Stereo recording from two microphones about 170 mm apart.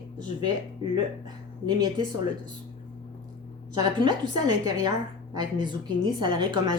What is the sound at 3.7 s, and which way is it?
A woman's voice, 25° right (ahead or behind).